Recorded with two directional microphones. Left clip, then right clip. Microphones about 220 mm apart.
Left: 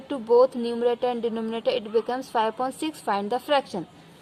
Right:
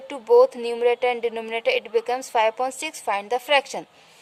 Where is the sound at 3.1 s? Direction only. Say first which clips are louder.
Right 2 dB; 15° right (ahead or behind).